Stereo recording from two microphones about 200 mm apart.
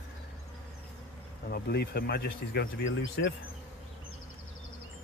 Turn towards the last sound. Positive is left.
turn(degrees=65)  # may be behind; listen again after turning